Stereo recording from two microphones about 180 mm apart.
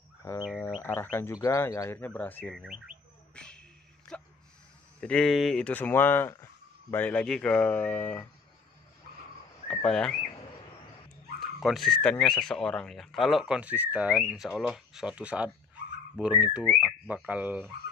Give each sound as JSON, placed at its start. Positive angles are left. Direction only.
{"t": 0.2, "sound": "bird", "side_deg": 15}
{"t": 0.7, "sound": "speech", "side_deg": 10}
{"t": 3.3, "sound": "a sound", "side_deg": 5}
{"t": 5.0, "sound": "speech", "side_deg": 5}
{"t": 9.7, "sound": "speech", "side_deg": 5}
{"t": 11.3, "sound": "speech", "side_deg": 0}